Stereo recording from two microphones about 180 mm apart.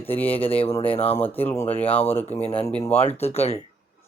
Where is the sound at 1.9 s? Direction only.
35° left (ahead or behind).